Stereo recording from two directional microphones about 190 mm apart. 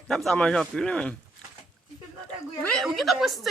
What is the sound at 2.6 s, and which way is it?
Speech, 5° left (ahead or behind).